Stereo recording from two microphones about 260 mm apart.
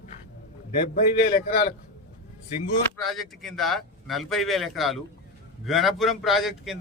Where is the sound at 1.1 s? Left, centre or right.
Left.